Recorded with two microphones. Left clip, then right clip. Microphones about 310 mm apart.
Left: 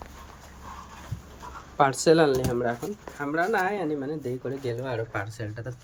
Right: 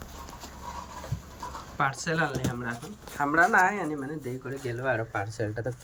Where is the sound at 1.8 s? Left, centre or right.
Left.